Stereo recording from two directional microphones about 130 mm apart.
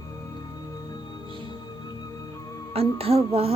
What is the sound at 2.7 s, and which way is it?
Speech, 50° right (ahead or behind).